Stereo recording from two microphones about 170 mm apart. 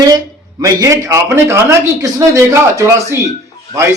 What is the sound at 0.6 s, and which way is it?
A man's voice, 20° right (ahead or behind).